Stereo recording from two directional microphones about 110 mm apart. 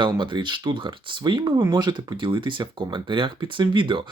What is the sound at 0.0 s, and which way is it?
Speech, 45° right (ahead or behind).